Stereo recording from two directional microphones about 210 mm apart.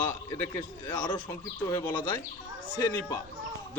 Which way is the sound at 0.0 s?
20° left (ahead or behind).